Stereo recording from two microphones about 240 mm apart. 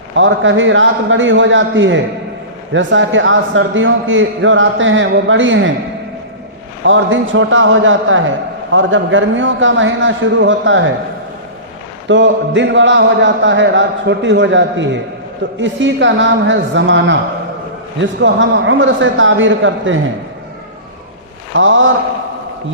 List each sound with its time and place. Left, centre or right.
0.2 s a man's voice: right
6.8 s a man's voice: right
12.0 s a man's voice: right
21.5 s a man's voice: right